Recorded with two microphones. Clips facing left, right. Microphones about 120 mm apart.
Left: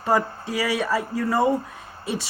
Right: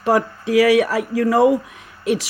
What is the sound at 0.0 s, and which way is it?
Speech, 90° right.